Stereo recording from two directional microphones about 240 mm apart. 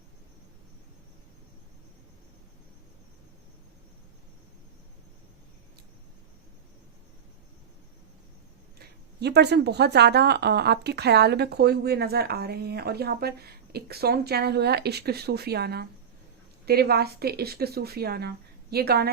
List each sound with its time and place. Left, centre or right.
8.8 s speech: right